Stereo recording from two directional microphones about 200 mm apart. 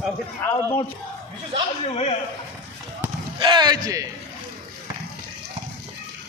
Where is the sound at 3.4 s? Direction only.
20° right (ahead or behind).